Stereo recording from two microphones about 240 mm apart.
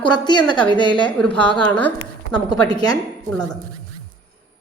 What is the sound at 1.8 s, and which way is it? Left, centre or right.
Speech, centre.